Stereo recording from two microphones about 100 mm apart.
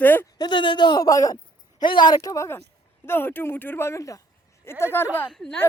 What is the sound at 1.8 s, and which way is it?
Speech, 50° left (ahead or behind).